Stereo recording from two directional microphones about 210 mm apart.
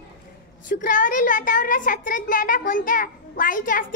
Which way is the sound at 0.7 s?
40° left (ahead or behind).